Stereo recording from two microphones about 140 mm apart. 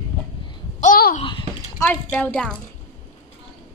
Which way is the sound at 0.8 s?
80° left.